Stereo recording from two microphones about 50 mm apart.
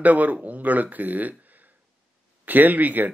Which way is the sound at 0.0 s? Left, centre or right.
Right.